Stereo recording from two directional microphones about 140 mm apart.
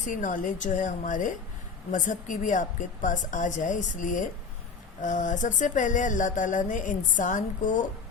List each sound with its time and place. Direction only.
0.1 s a woman's voice: 65° left (ahead or behind)